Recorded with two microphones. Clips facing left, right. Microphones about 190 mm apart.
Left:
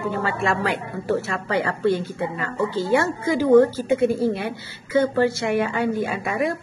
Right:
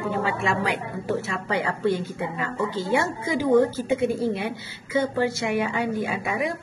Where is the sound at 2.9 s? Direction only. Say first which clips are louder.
Left 4 dB; 20° right (ahead or behind).